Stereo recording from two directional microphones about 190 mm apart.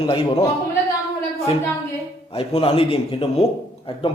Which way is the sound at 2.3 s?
30° left (ahead or behind).